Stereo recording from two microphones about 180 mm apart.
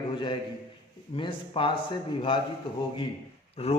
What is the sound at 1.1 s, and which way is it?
A man's voice, 30° left (ahead or behind).